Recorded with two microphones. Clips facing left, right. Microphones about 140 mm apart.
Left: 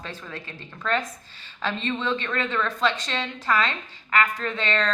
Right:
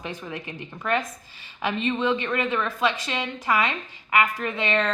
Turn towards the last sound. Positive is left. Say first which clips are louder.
# right 1 dB
turn(degrees=-15)  # may be behind; listen again after turning